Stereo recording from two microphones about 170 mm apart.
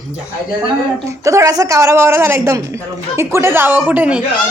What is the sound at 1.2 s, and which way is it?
A man's voice, 20° right (ahead or behind).